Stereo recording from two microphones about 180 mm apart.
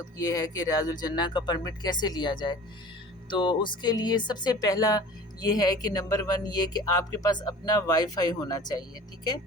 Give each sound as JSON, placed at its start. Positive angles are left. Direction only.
{"t": 0.2, "sound": "speech", "side_deg": 20}